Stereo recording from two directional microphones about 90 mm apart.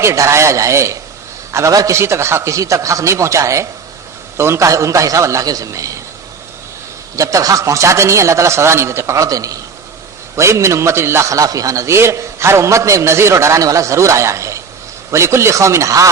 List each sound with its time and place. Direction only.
0.0 s a man's voice: 35° right (ahead or behind)
7.2 s a man's voice: 40° right (ahead or behind)